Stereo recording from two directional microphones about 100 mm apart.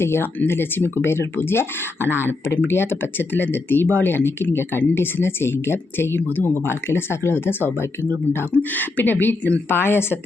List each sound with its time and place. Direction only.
0.0 s speech: 25° left (ahead or behind)